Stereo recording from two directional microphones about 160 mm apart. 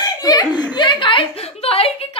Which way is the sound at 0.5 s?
10° right (ahead or behind).